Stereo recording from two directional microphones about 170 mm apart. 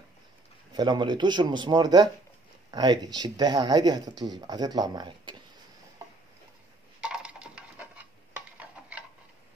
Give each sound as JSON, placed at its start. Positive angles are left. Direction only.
{"t": 0.7, "sound": "speech", "side_deg": -25}
{"t": 7.0, "sound": "a sound", "side_deg": -5}
{"t": 8.8, "sound": "tick-tock", "side_deg": -5}